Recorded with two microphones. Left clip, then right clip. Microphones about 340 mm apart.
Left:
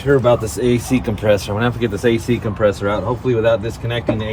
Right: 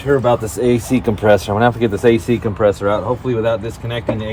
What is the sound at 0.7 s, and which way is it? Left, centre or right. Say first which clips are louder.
Speech: right 3 dB; right.